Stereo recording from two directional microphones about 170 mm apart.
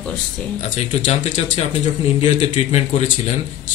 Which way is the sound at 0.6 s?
40° left (ahead or behind).